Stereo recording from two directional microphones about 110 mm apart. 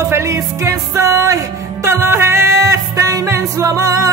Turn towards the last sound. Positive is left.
turn(degrees=-30)  # may be behind; listen again after turning